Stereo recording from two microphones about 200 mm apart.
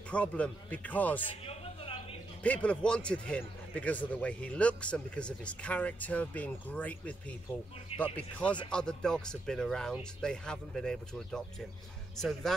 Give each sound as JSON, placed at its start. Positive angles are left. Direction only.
{"t": 0.1, "sound": "speech", "side_deg": 5}
{"t": 1.2, "sound": "a sound", "side_deg": 25}
{"t": 2.4, "sound": "speech", "side_deg": 5}